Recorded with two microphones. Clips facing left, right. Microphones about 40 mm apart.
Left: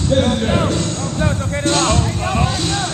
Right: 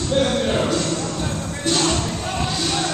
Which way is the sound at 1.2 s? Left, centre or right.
Left.